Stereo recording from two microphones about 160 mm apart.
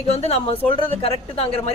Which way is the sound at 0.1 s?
40° left (ahead or behind).